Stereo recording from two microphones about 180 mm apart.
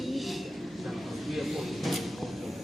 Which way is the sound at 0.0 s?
Centre (ahead or behind).